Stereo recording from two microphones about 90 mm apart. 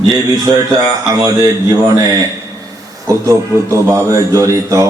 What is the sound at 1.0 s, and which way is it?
Speech, 40° right (ahead or behind).